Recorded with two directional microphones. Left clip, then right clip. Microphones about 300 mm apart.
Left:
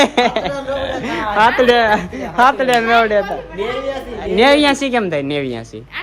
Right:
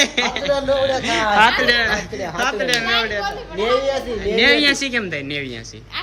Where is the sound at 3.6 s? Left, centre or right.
Right.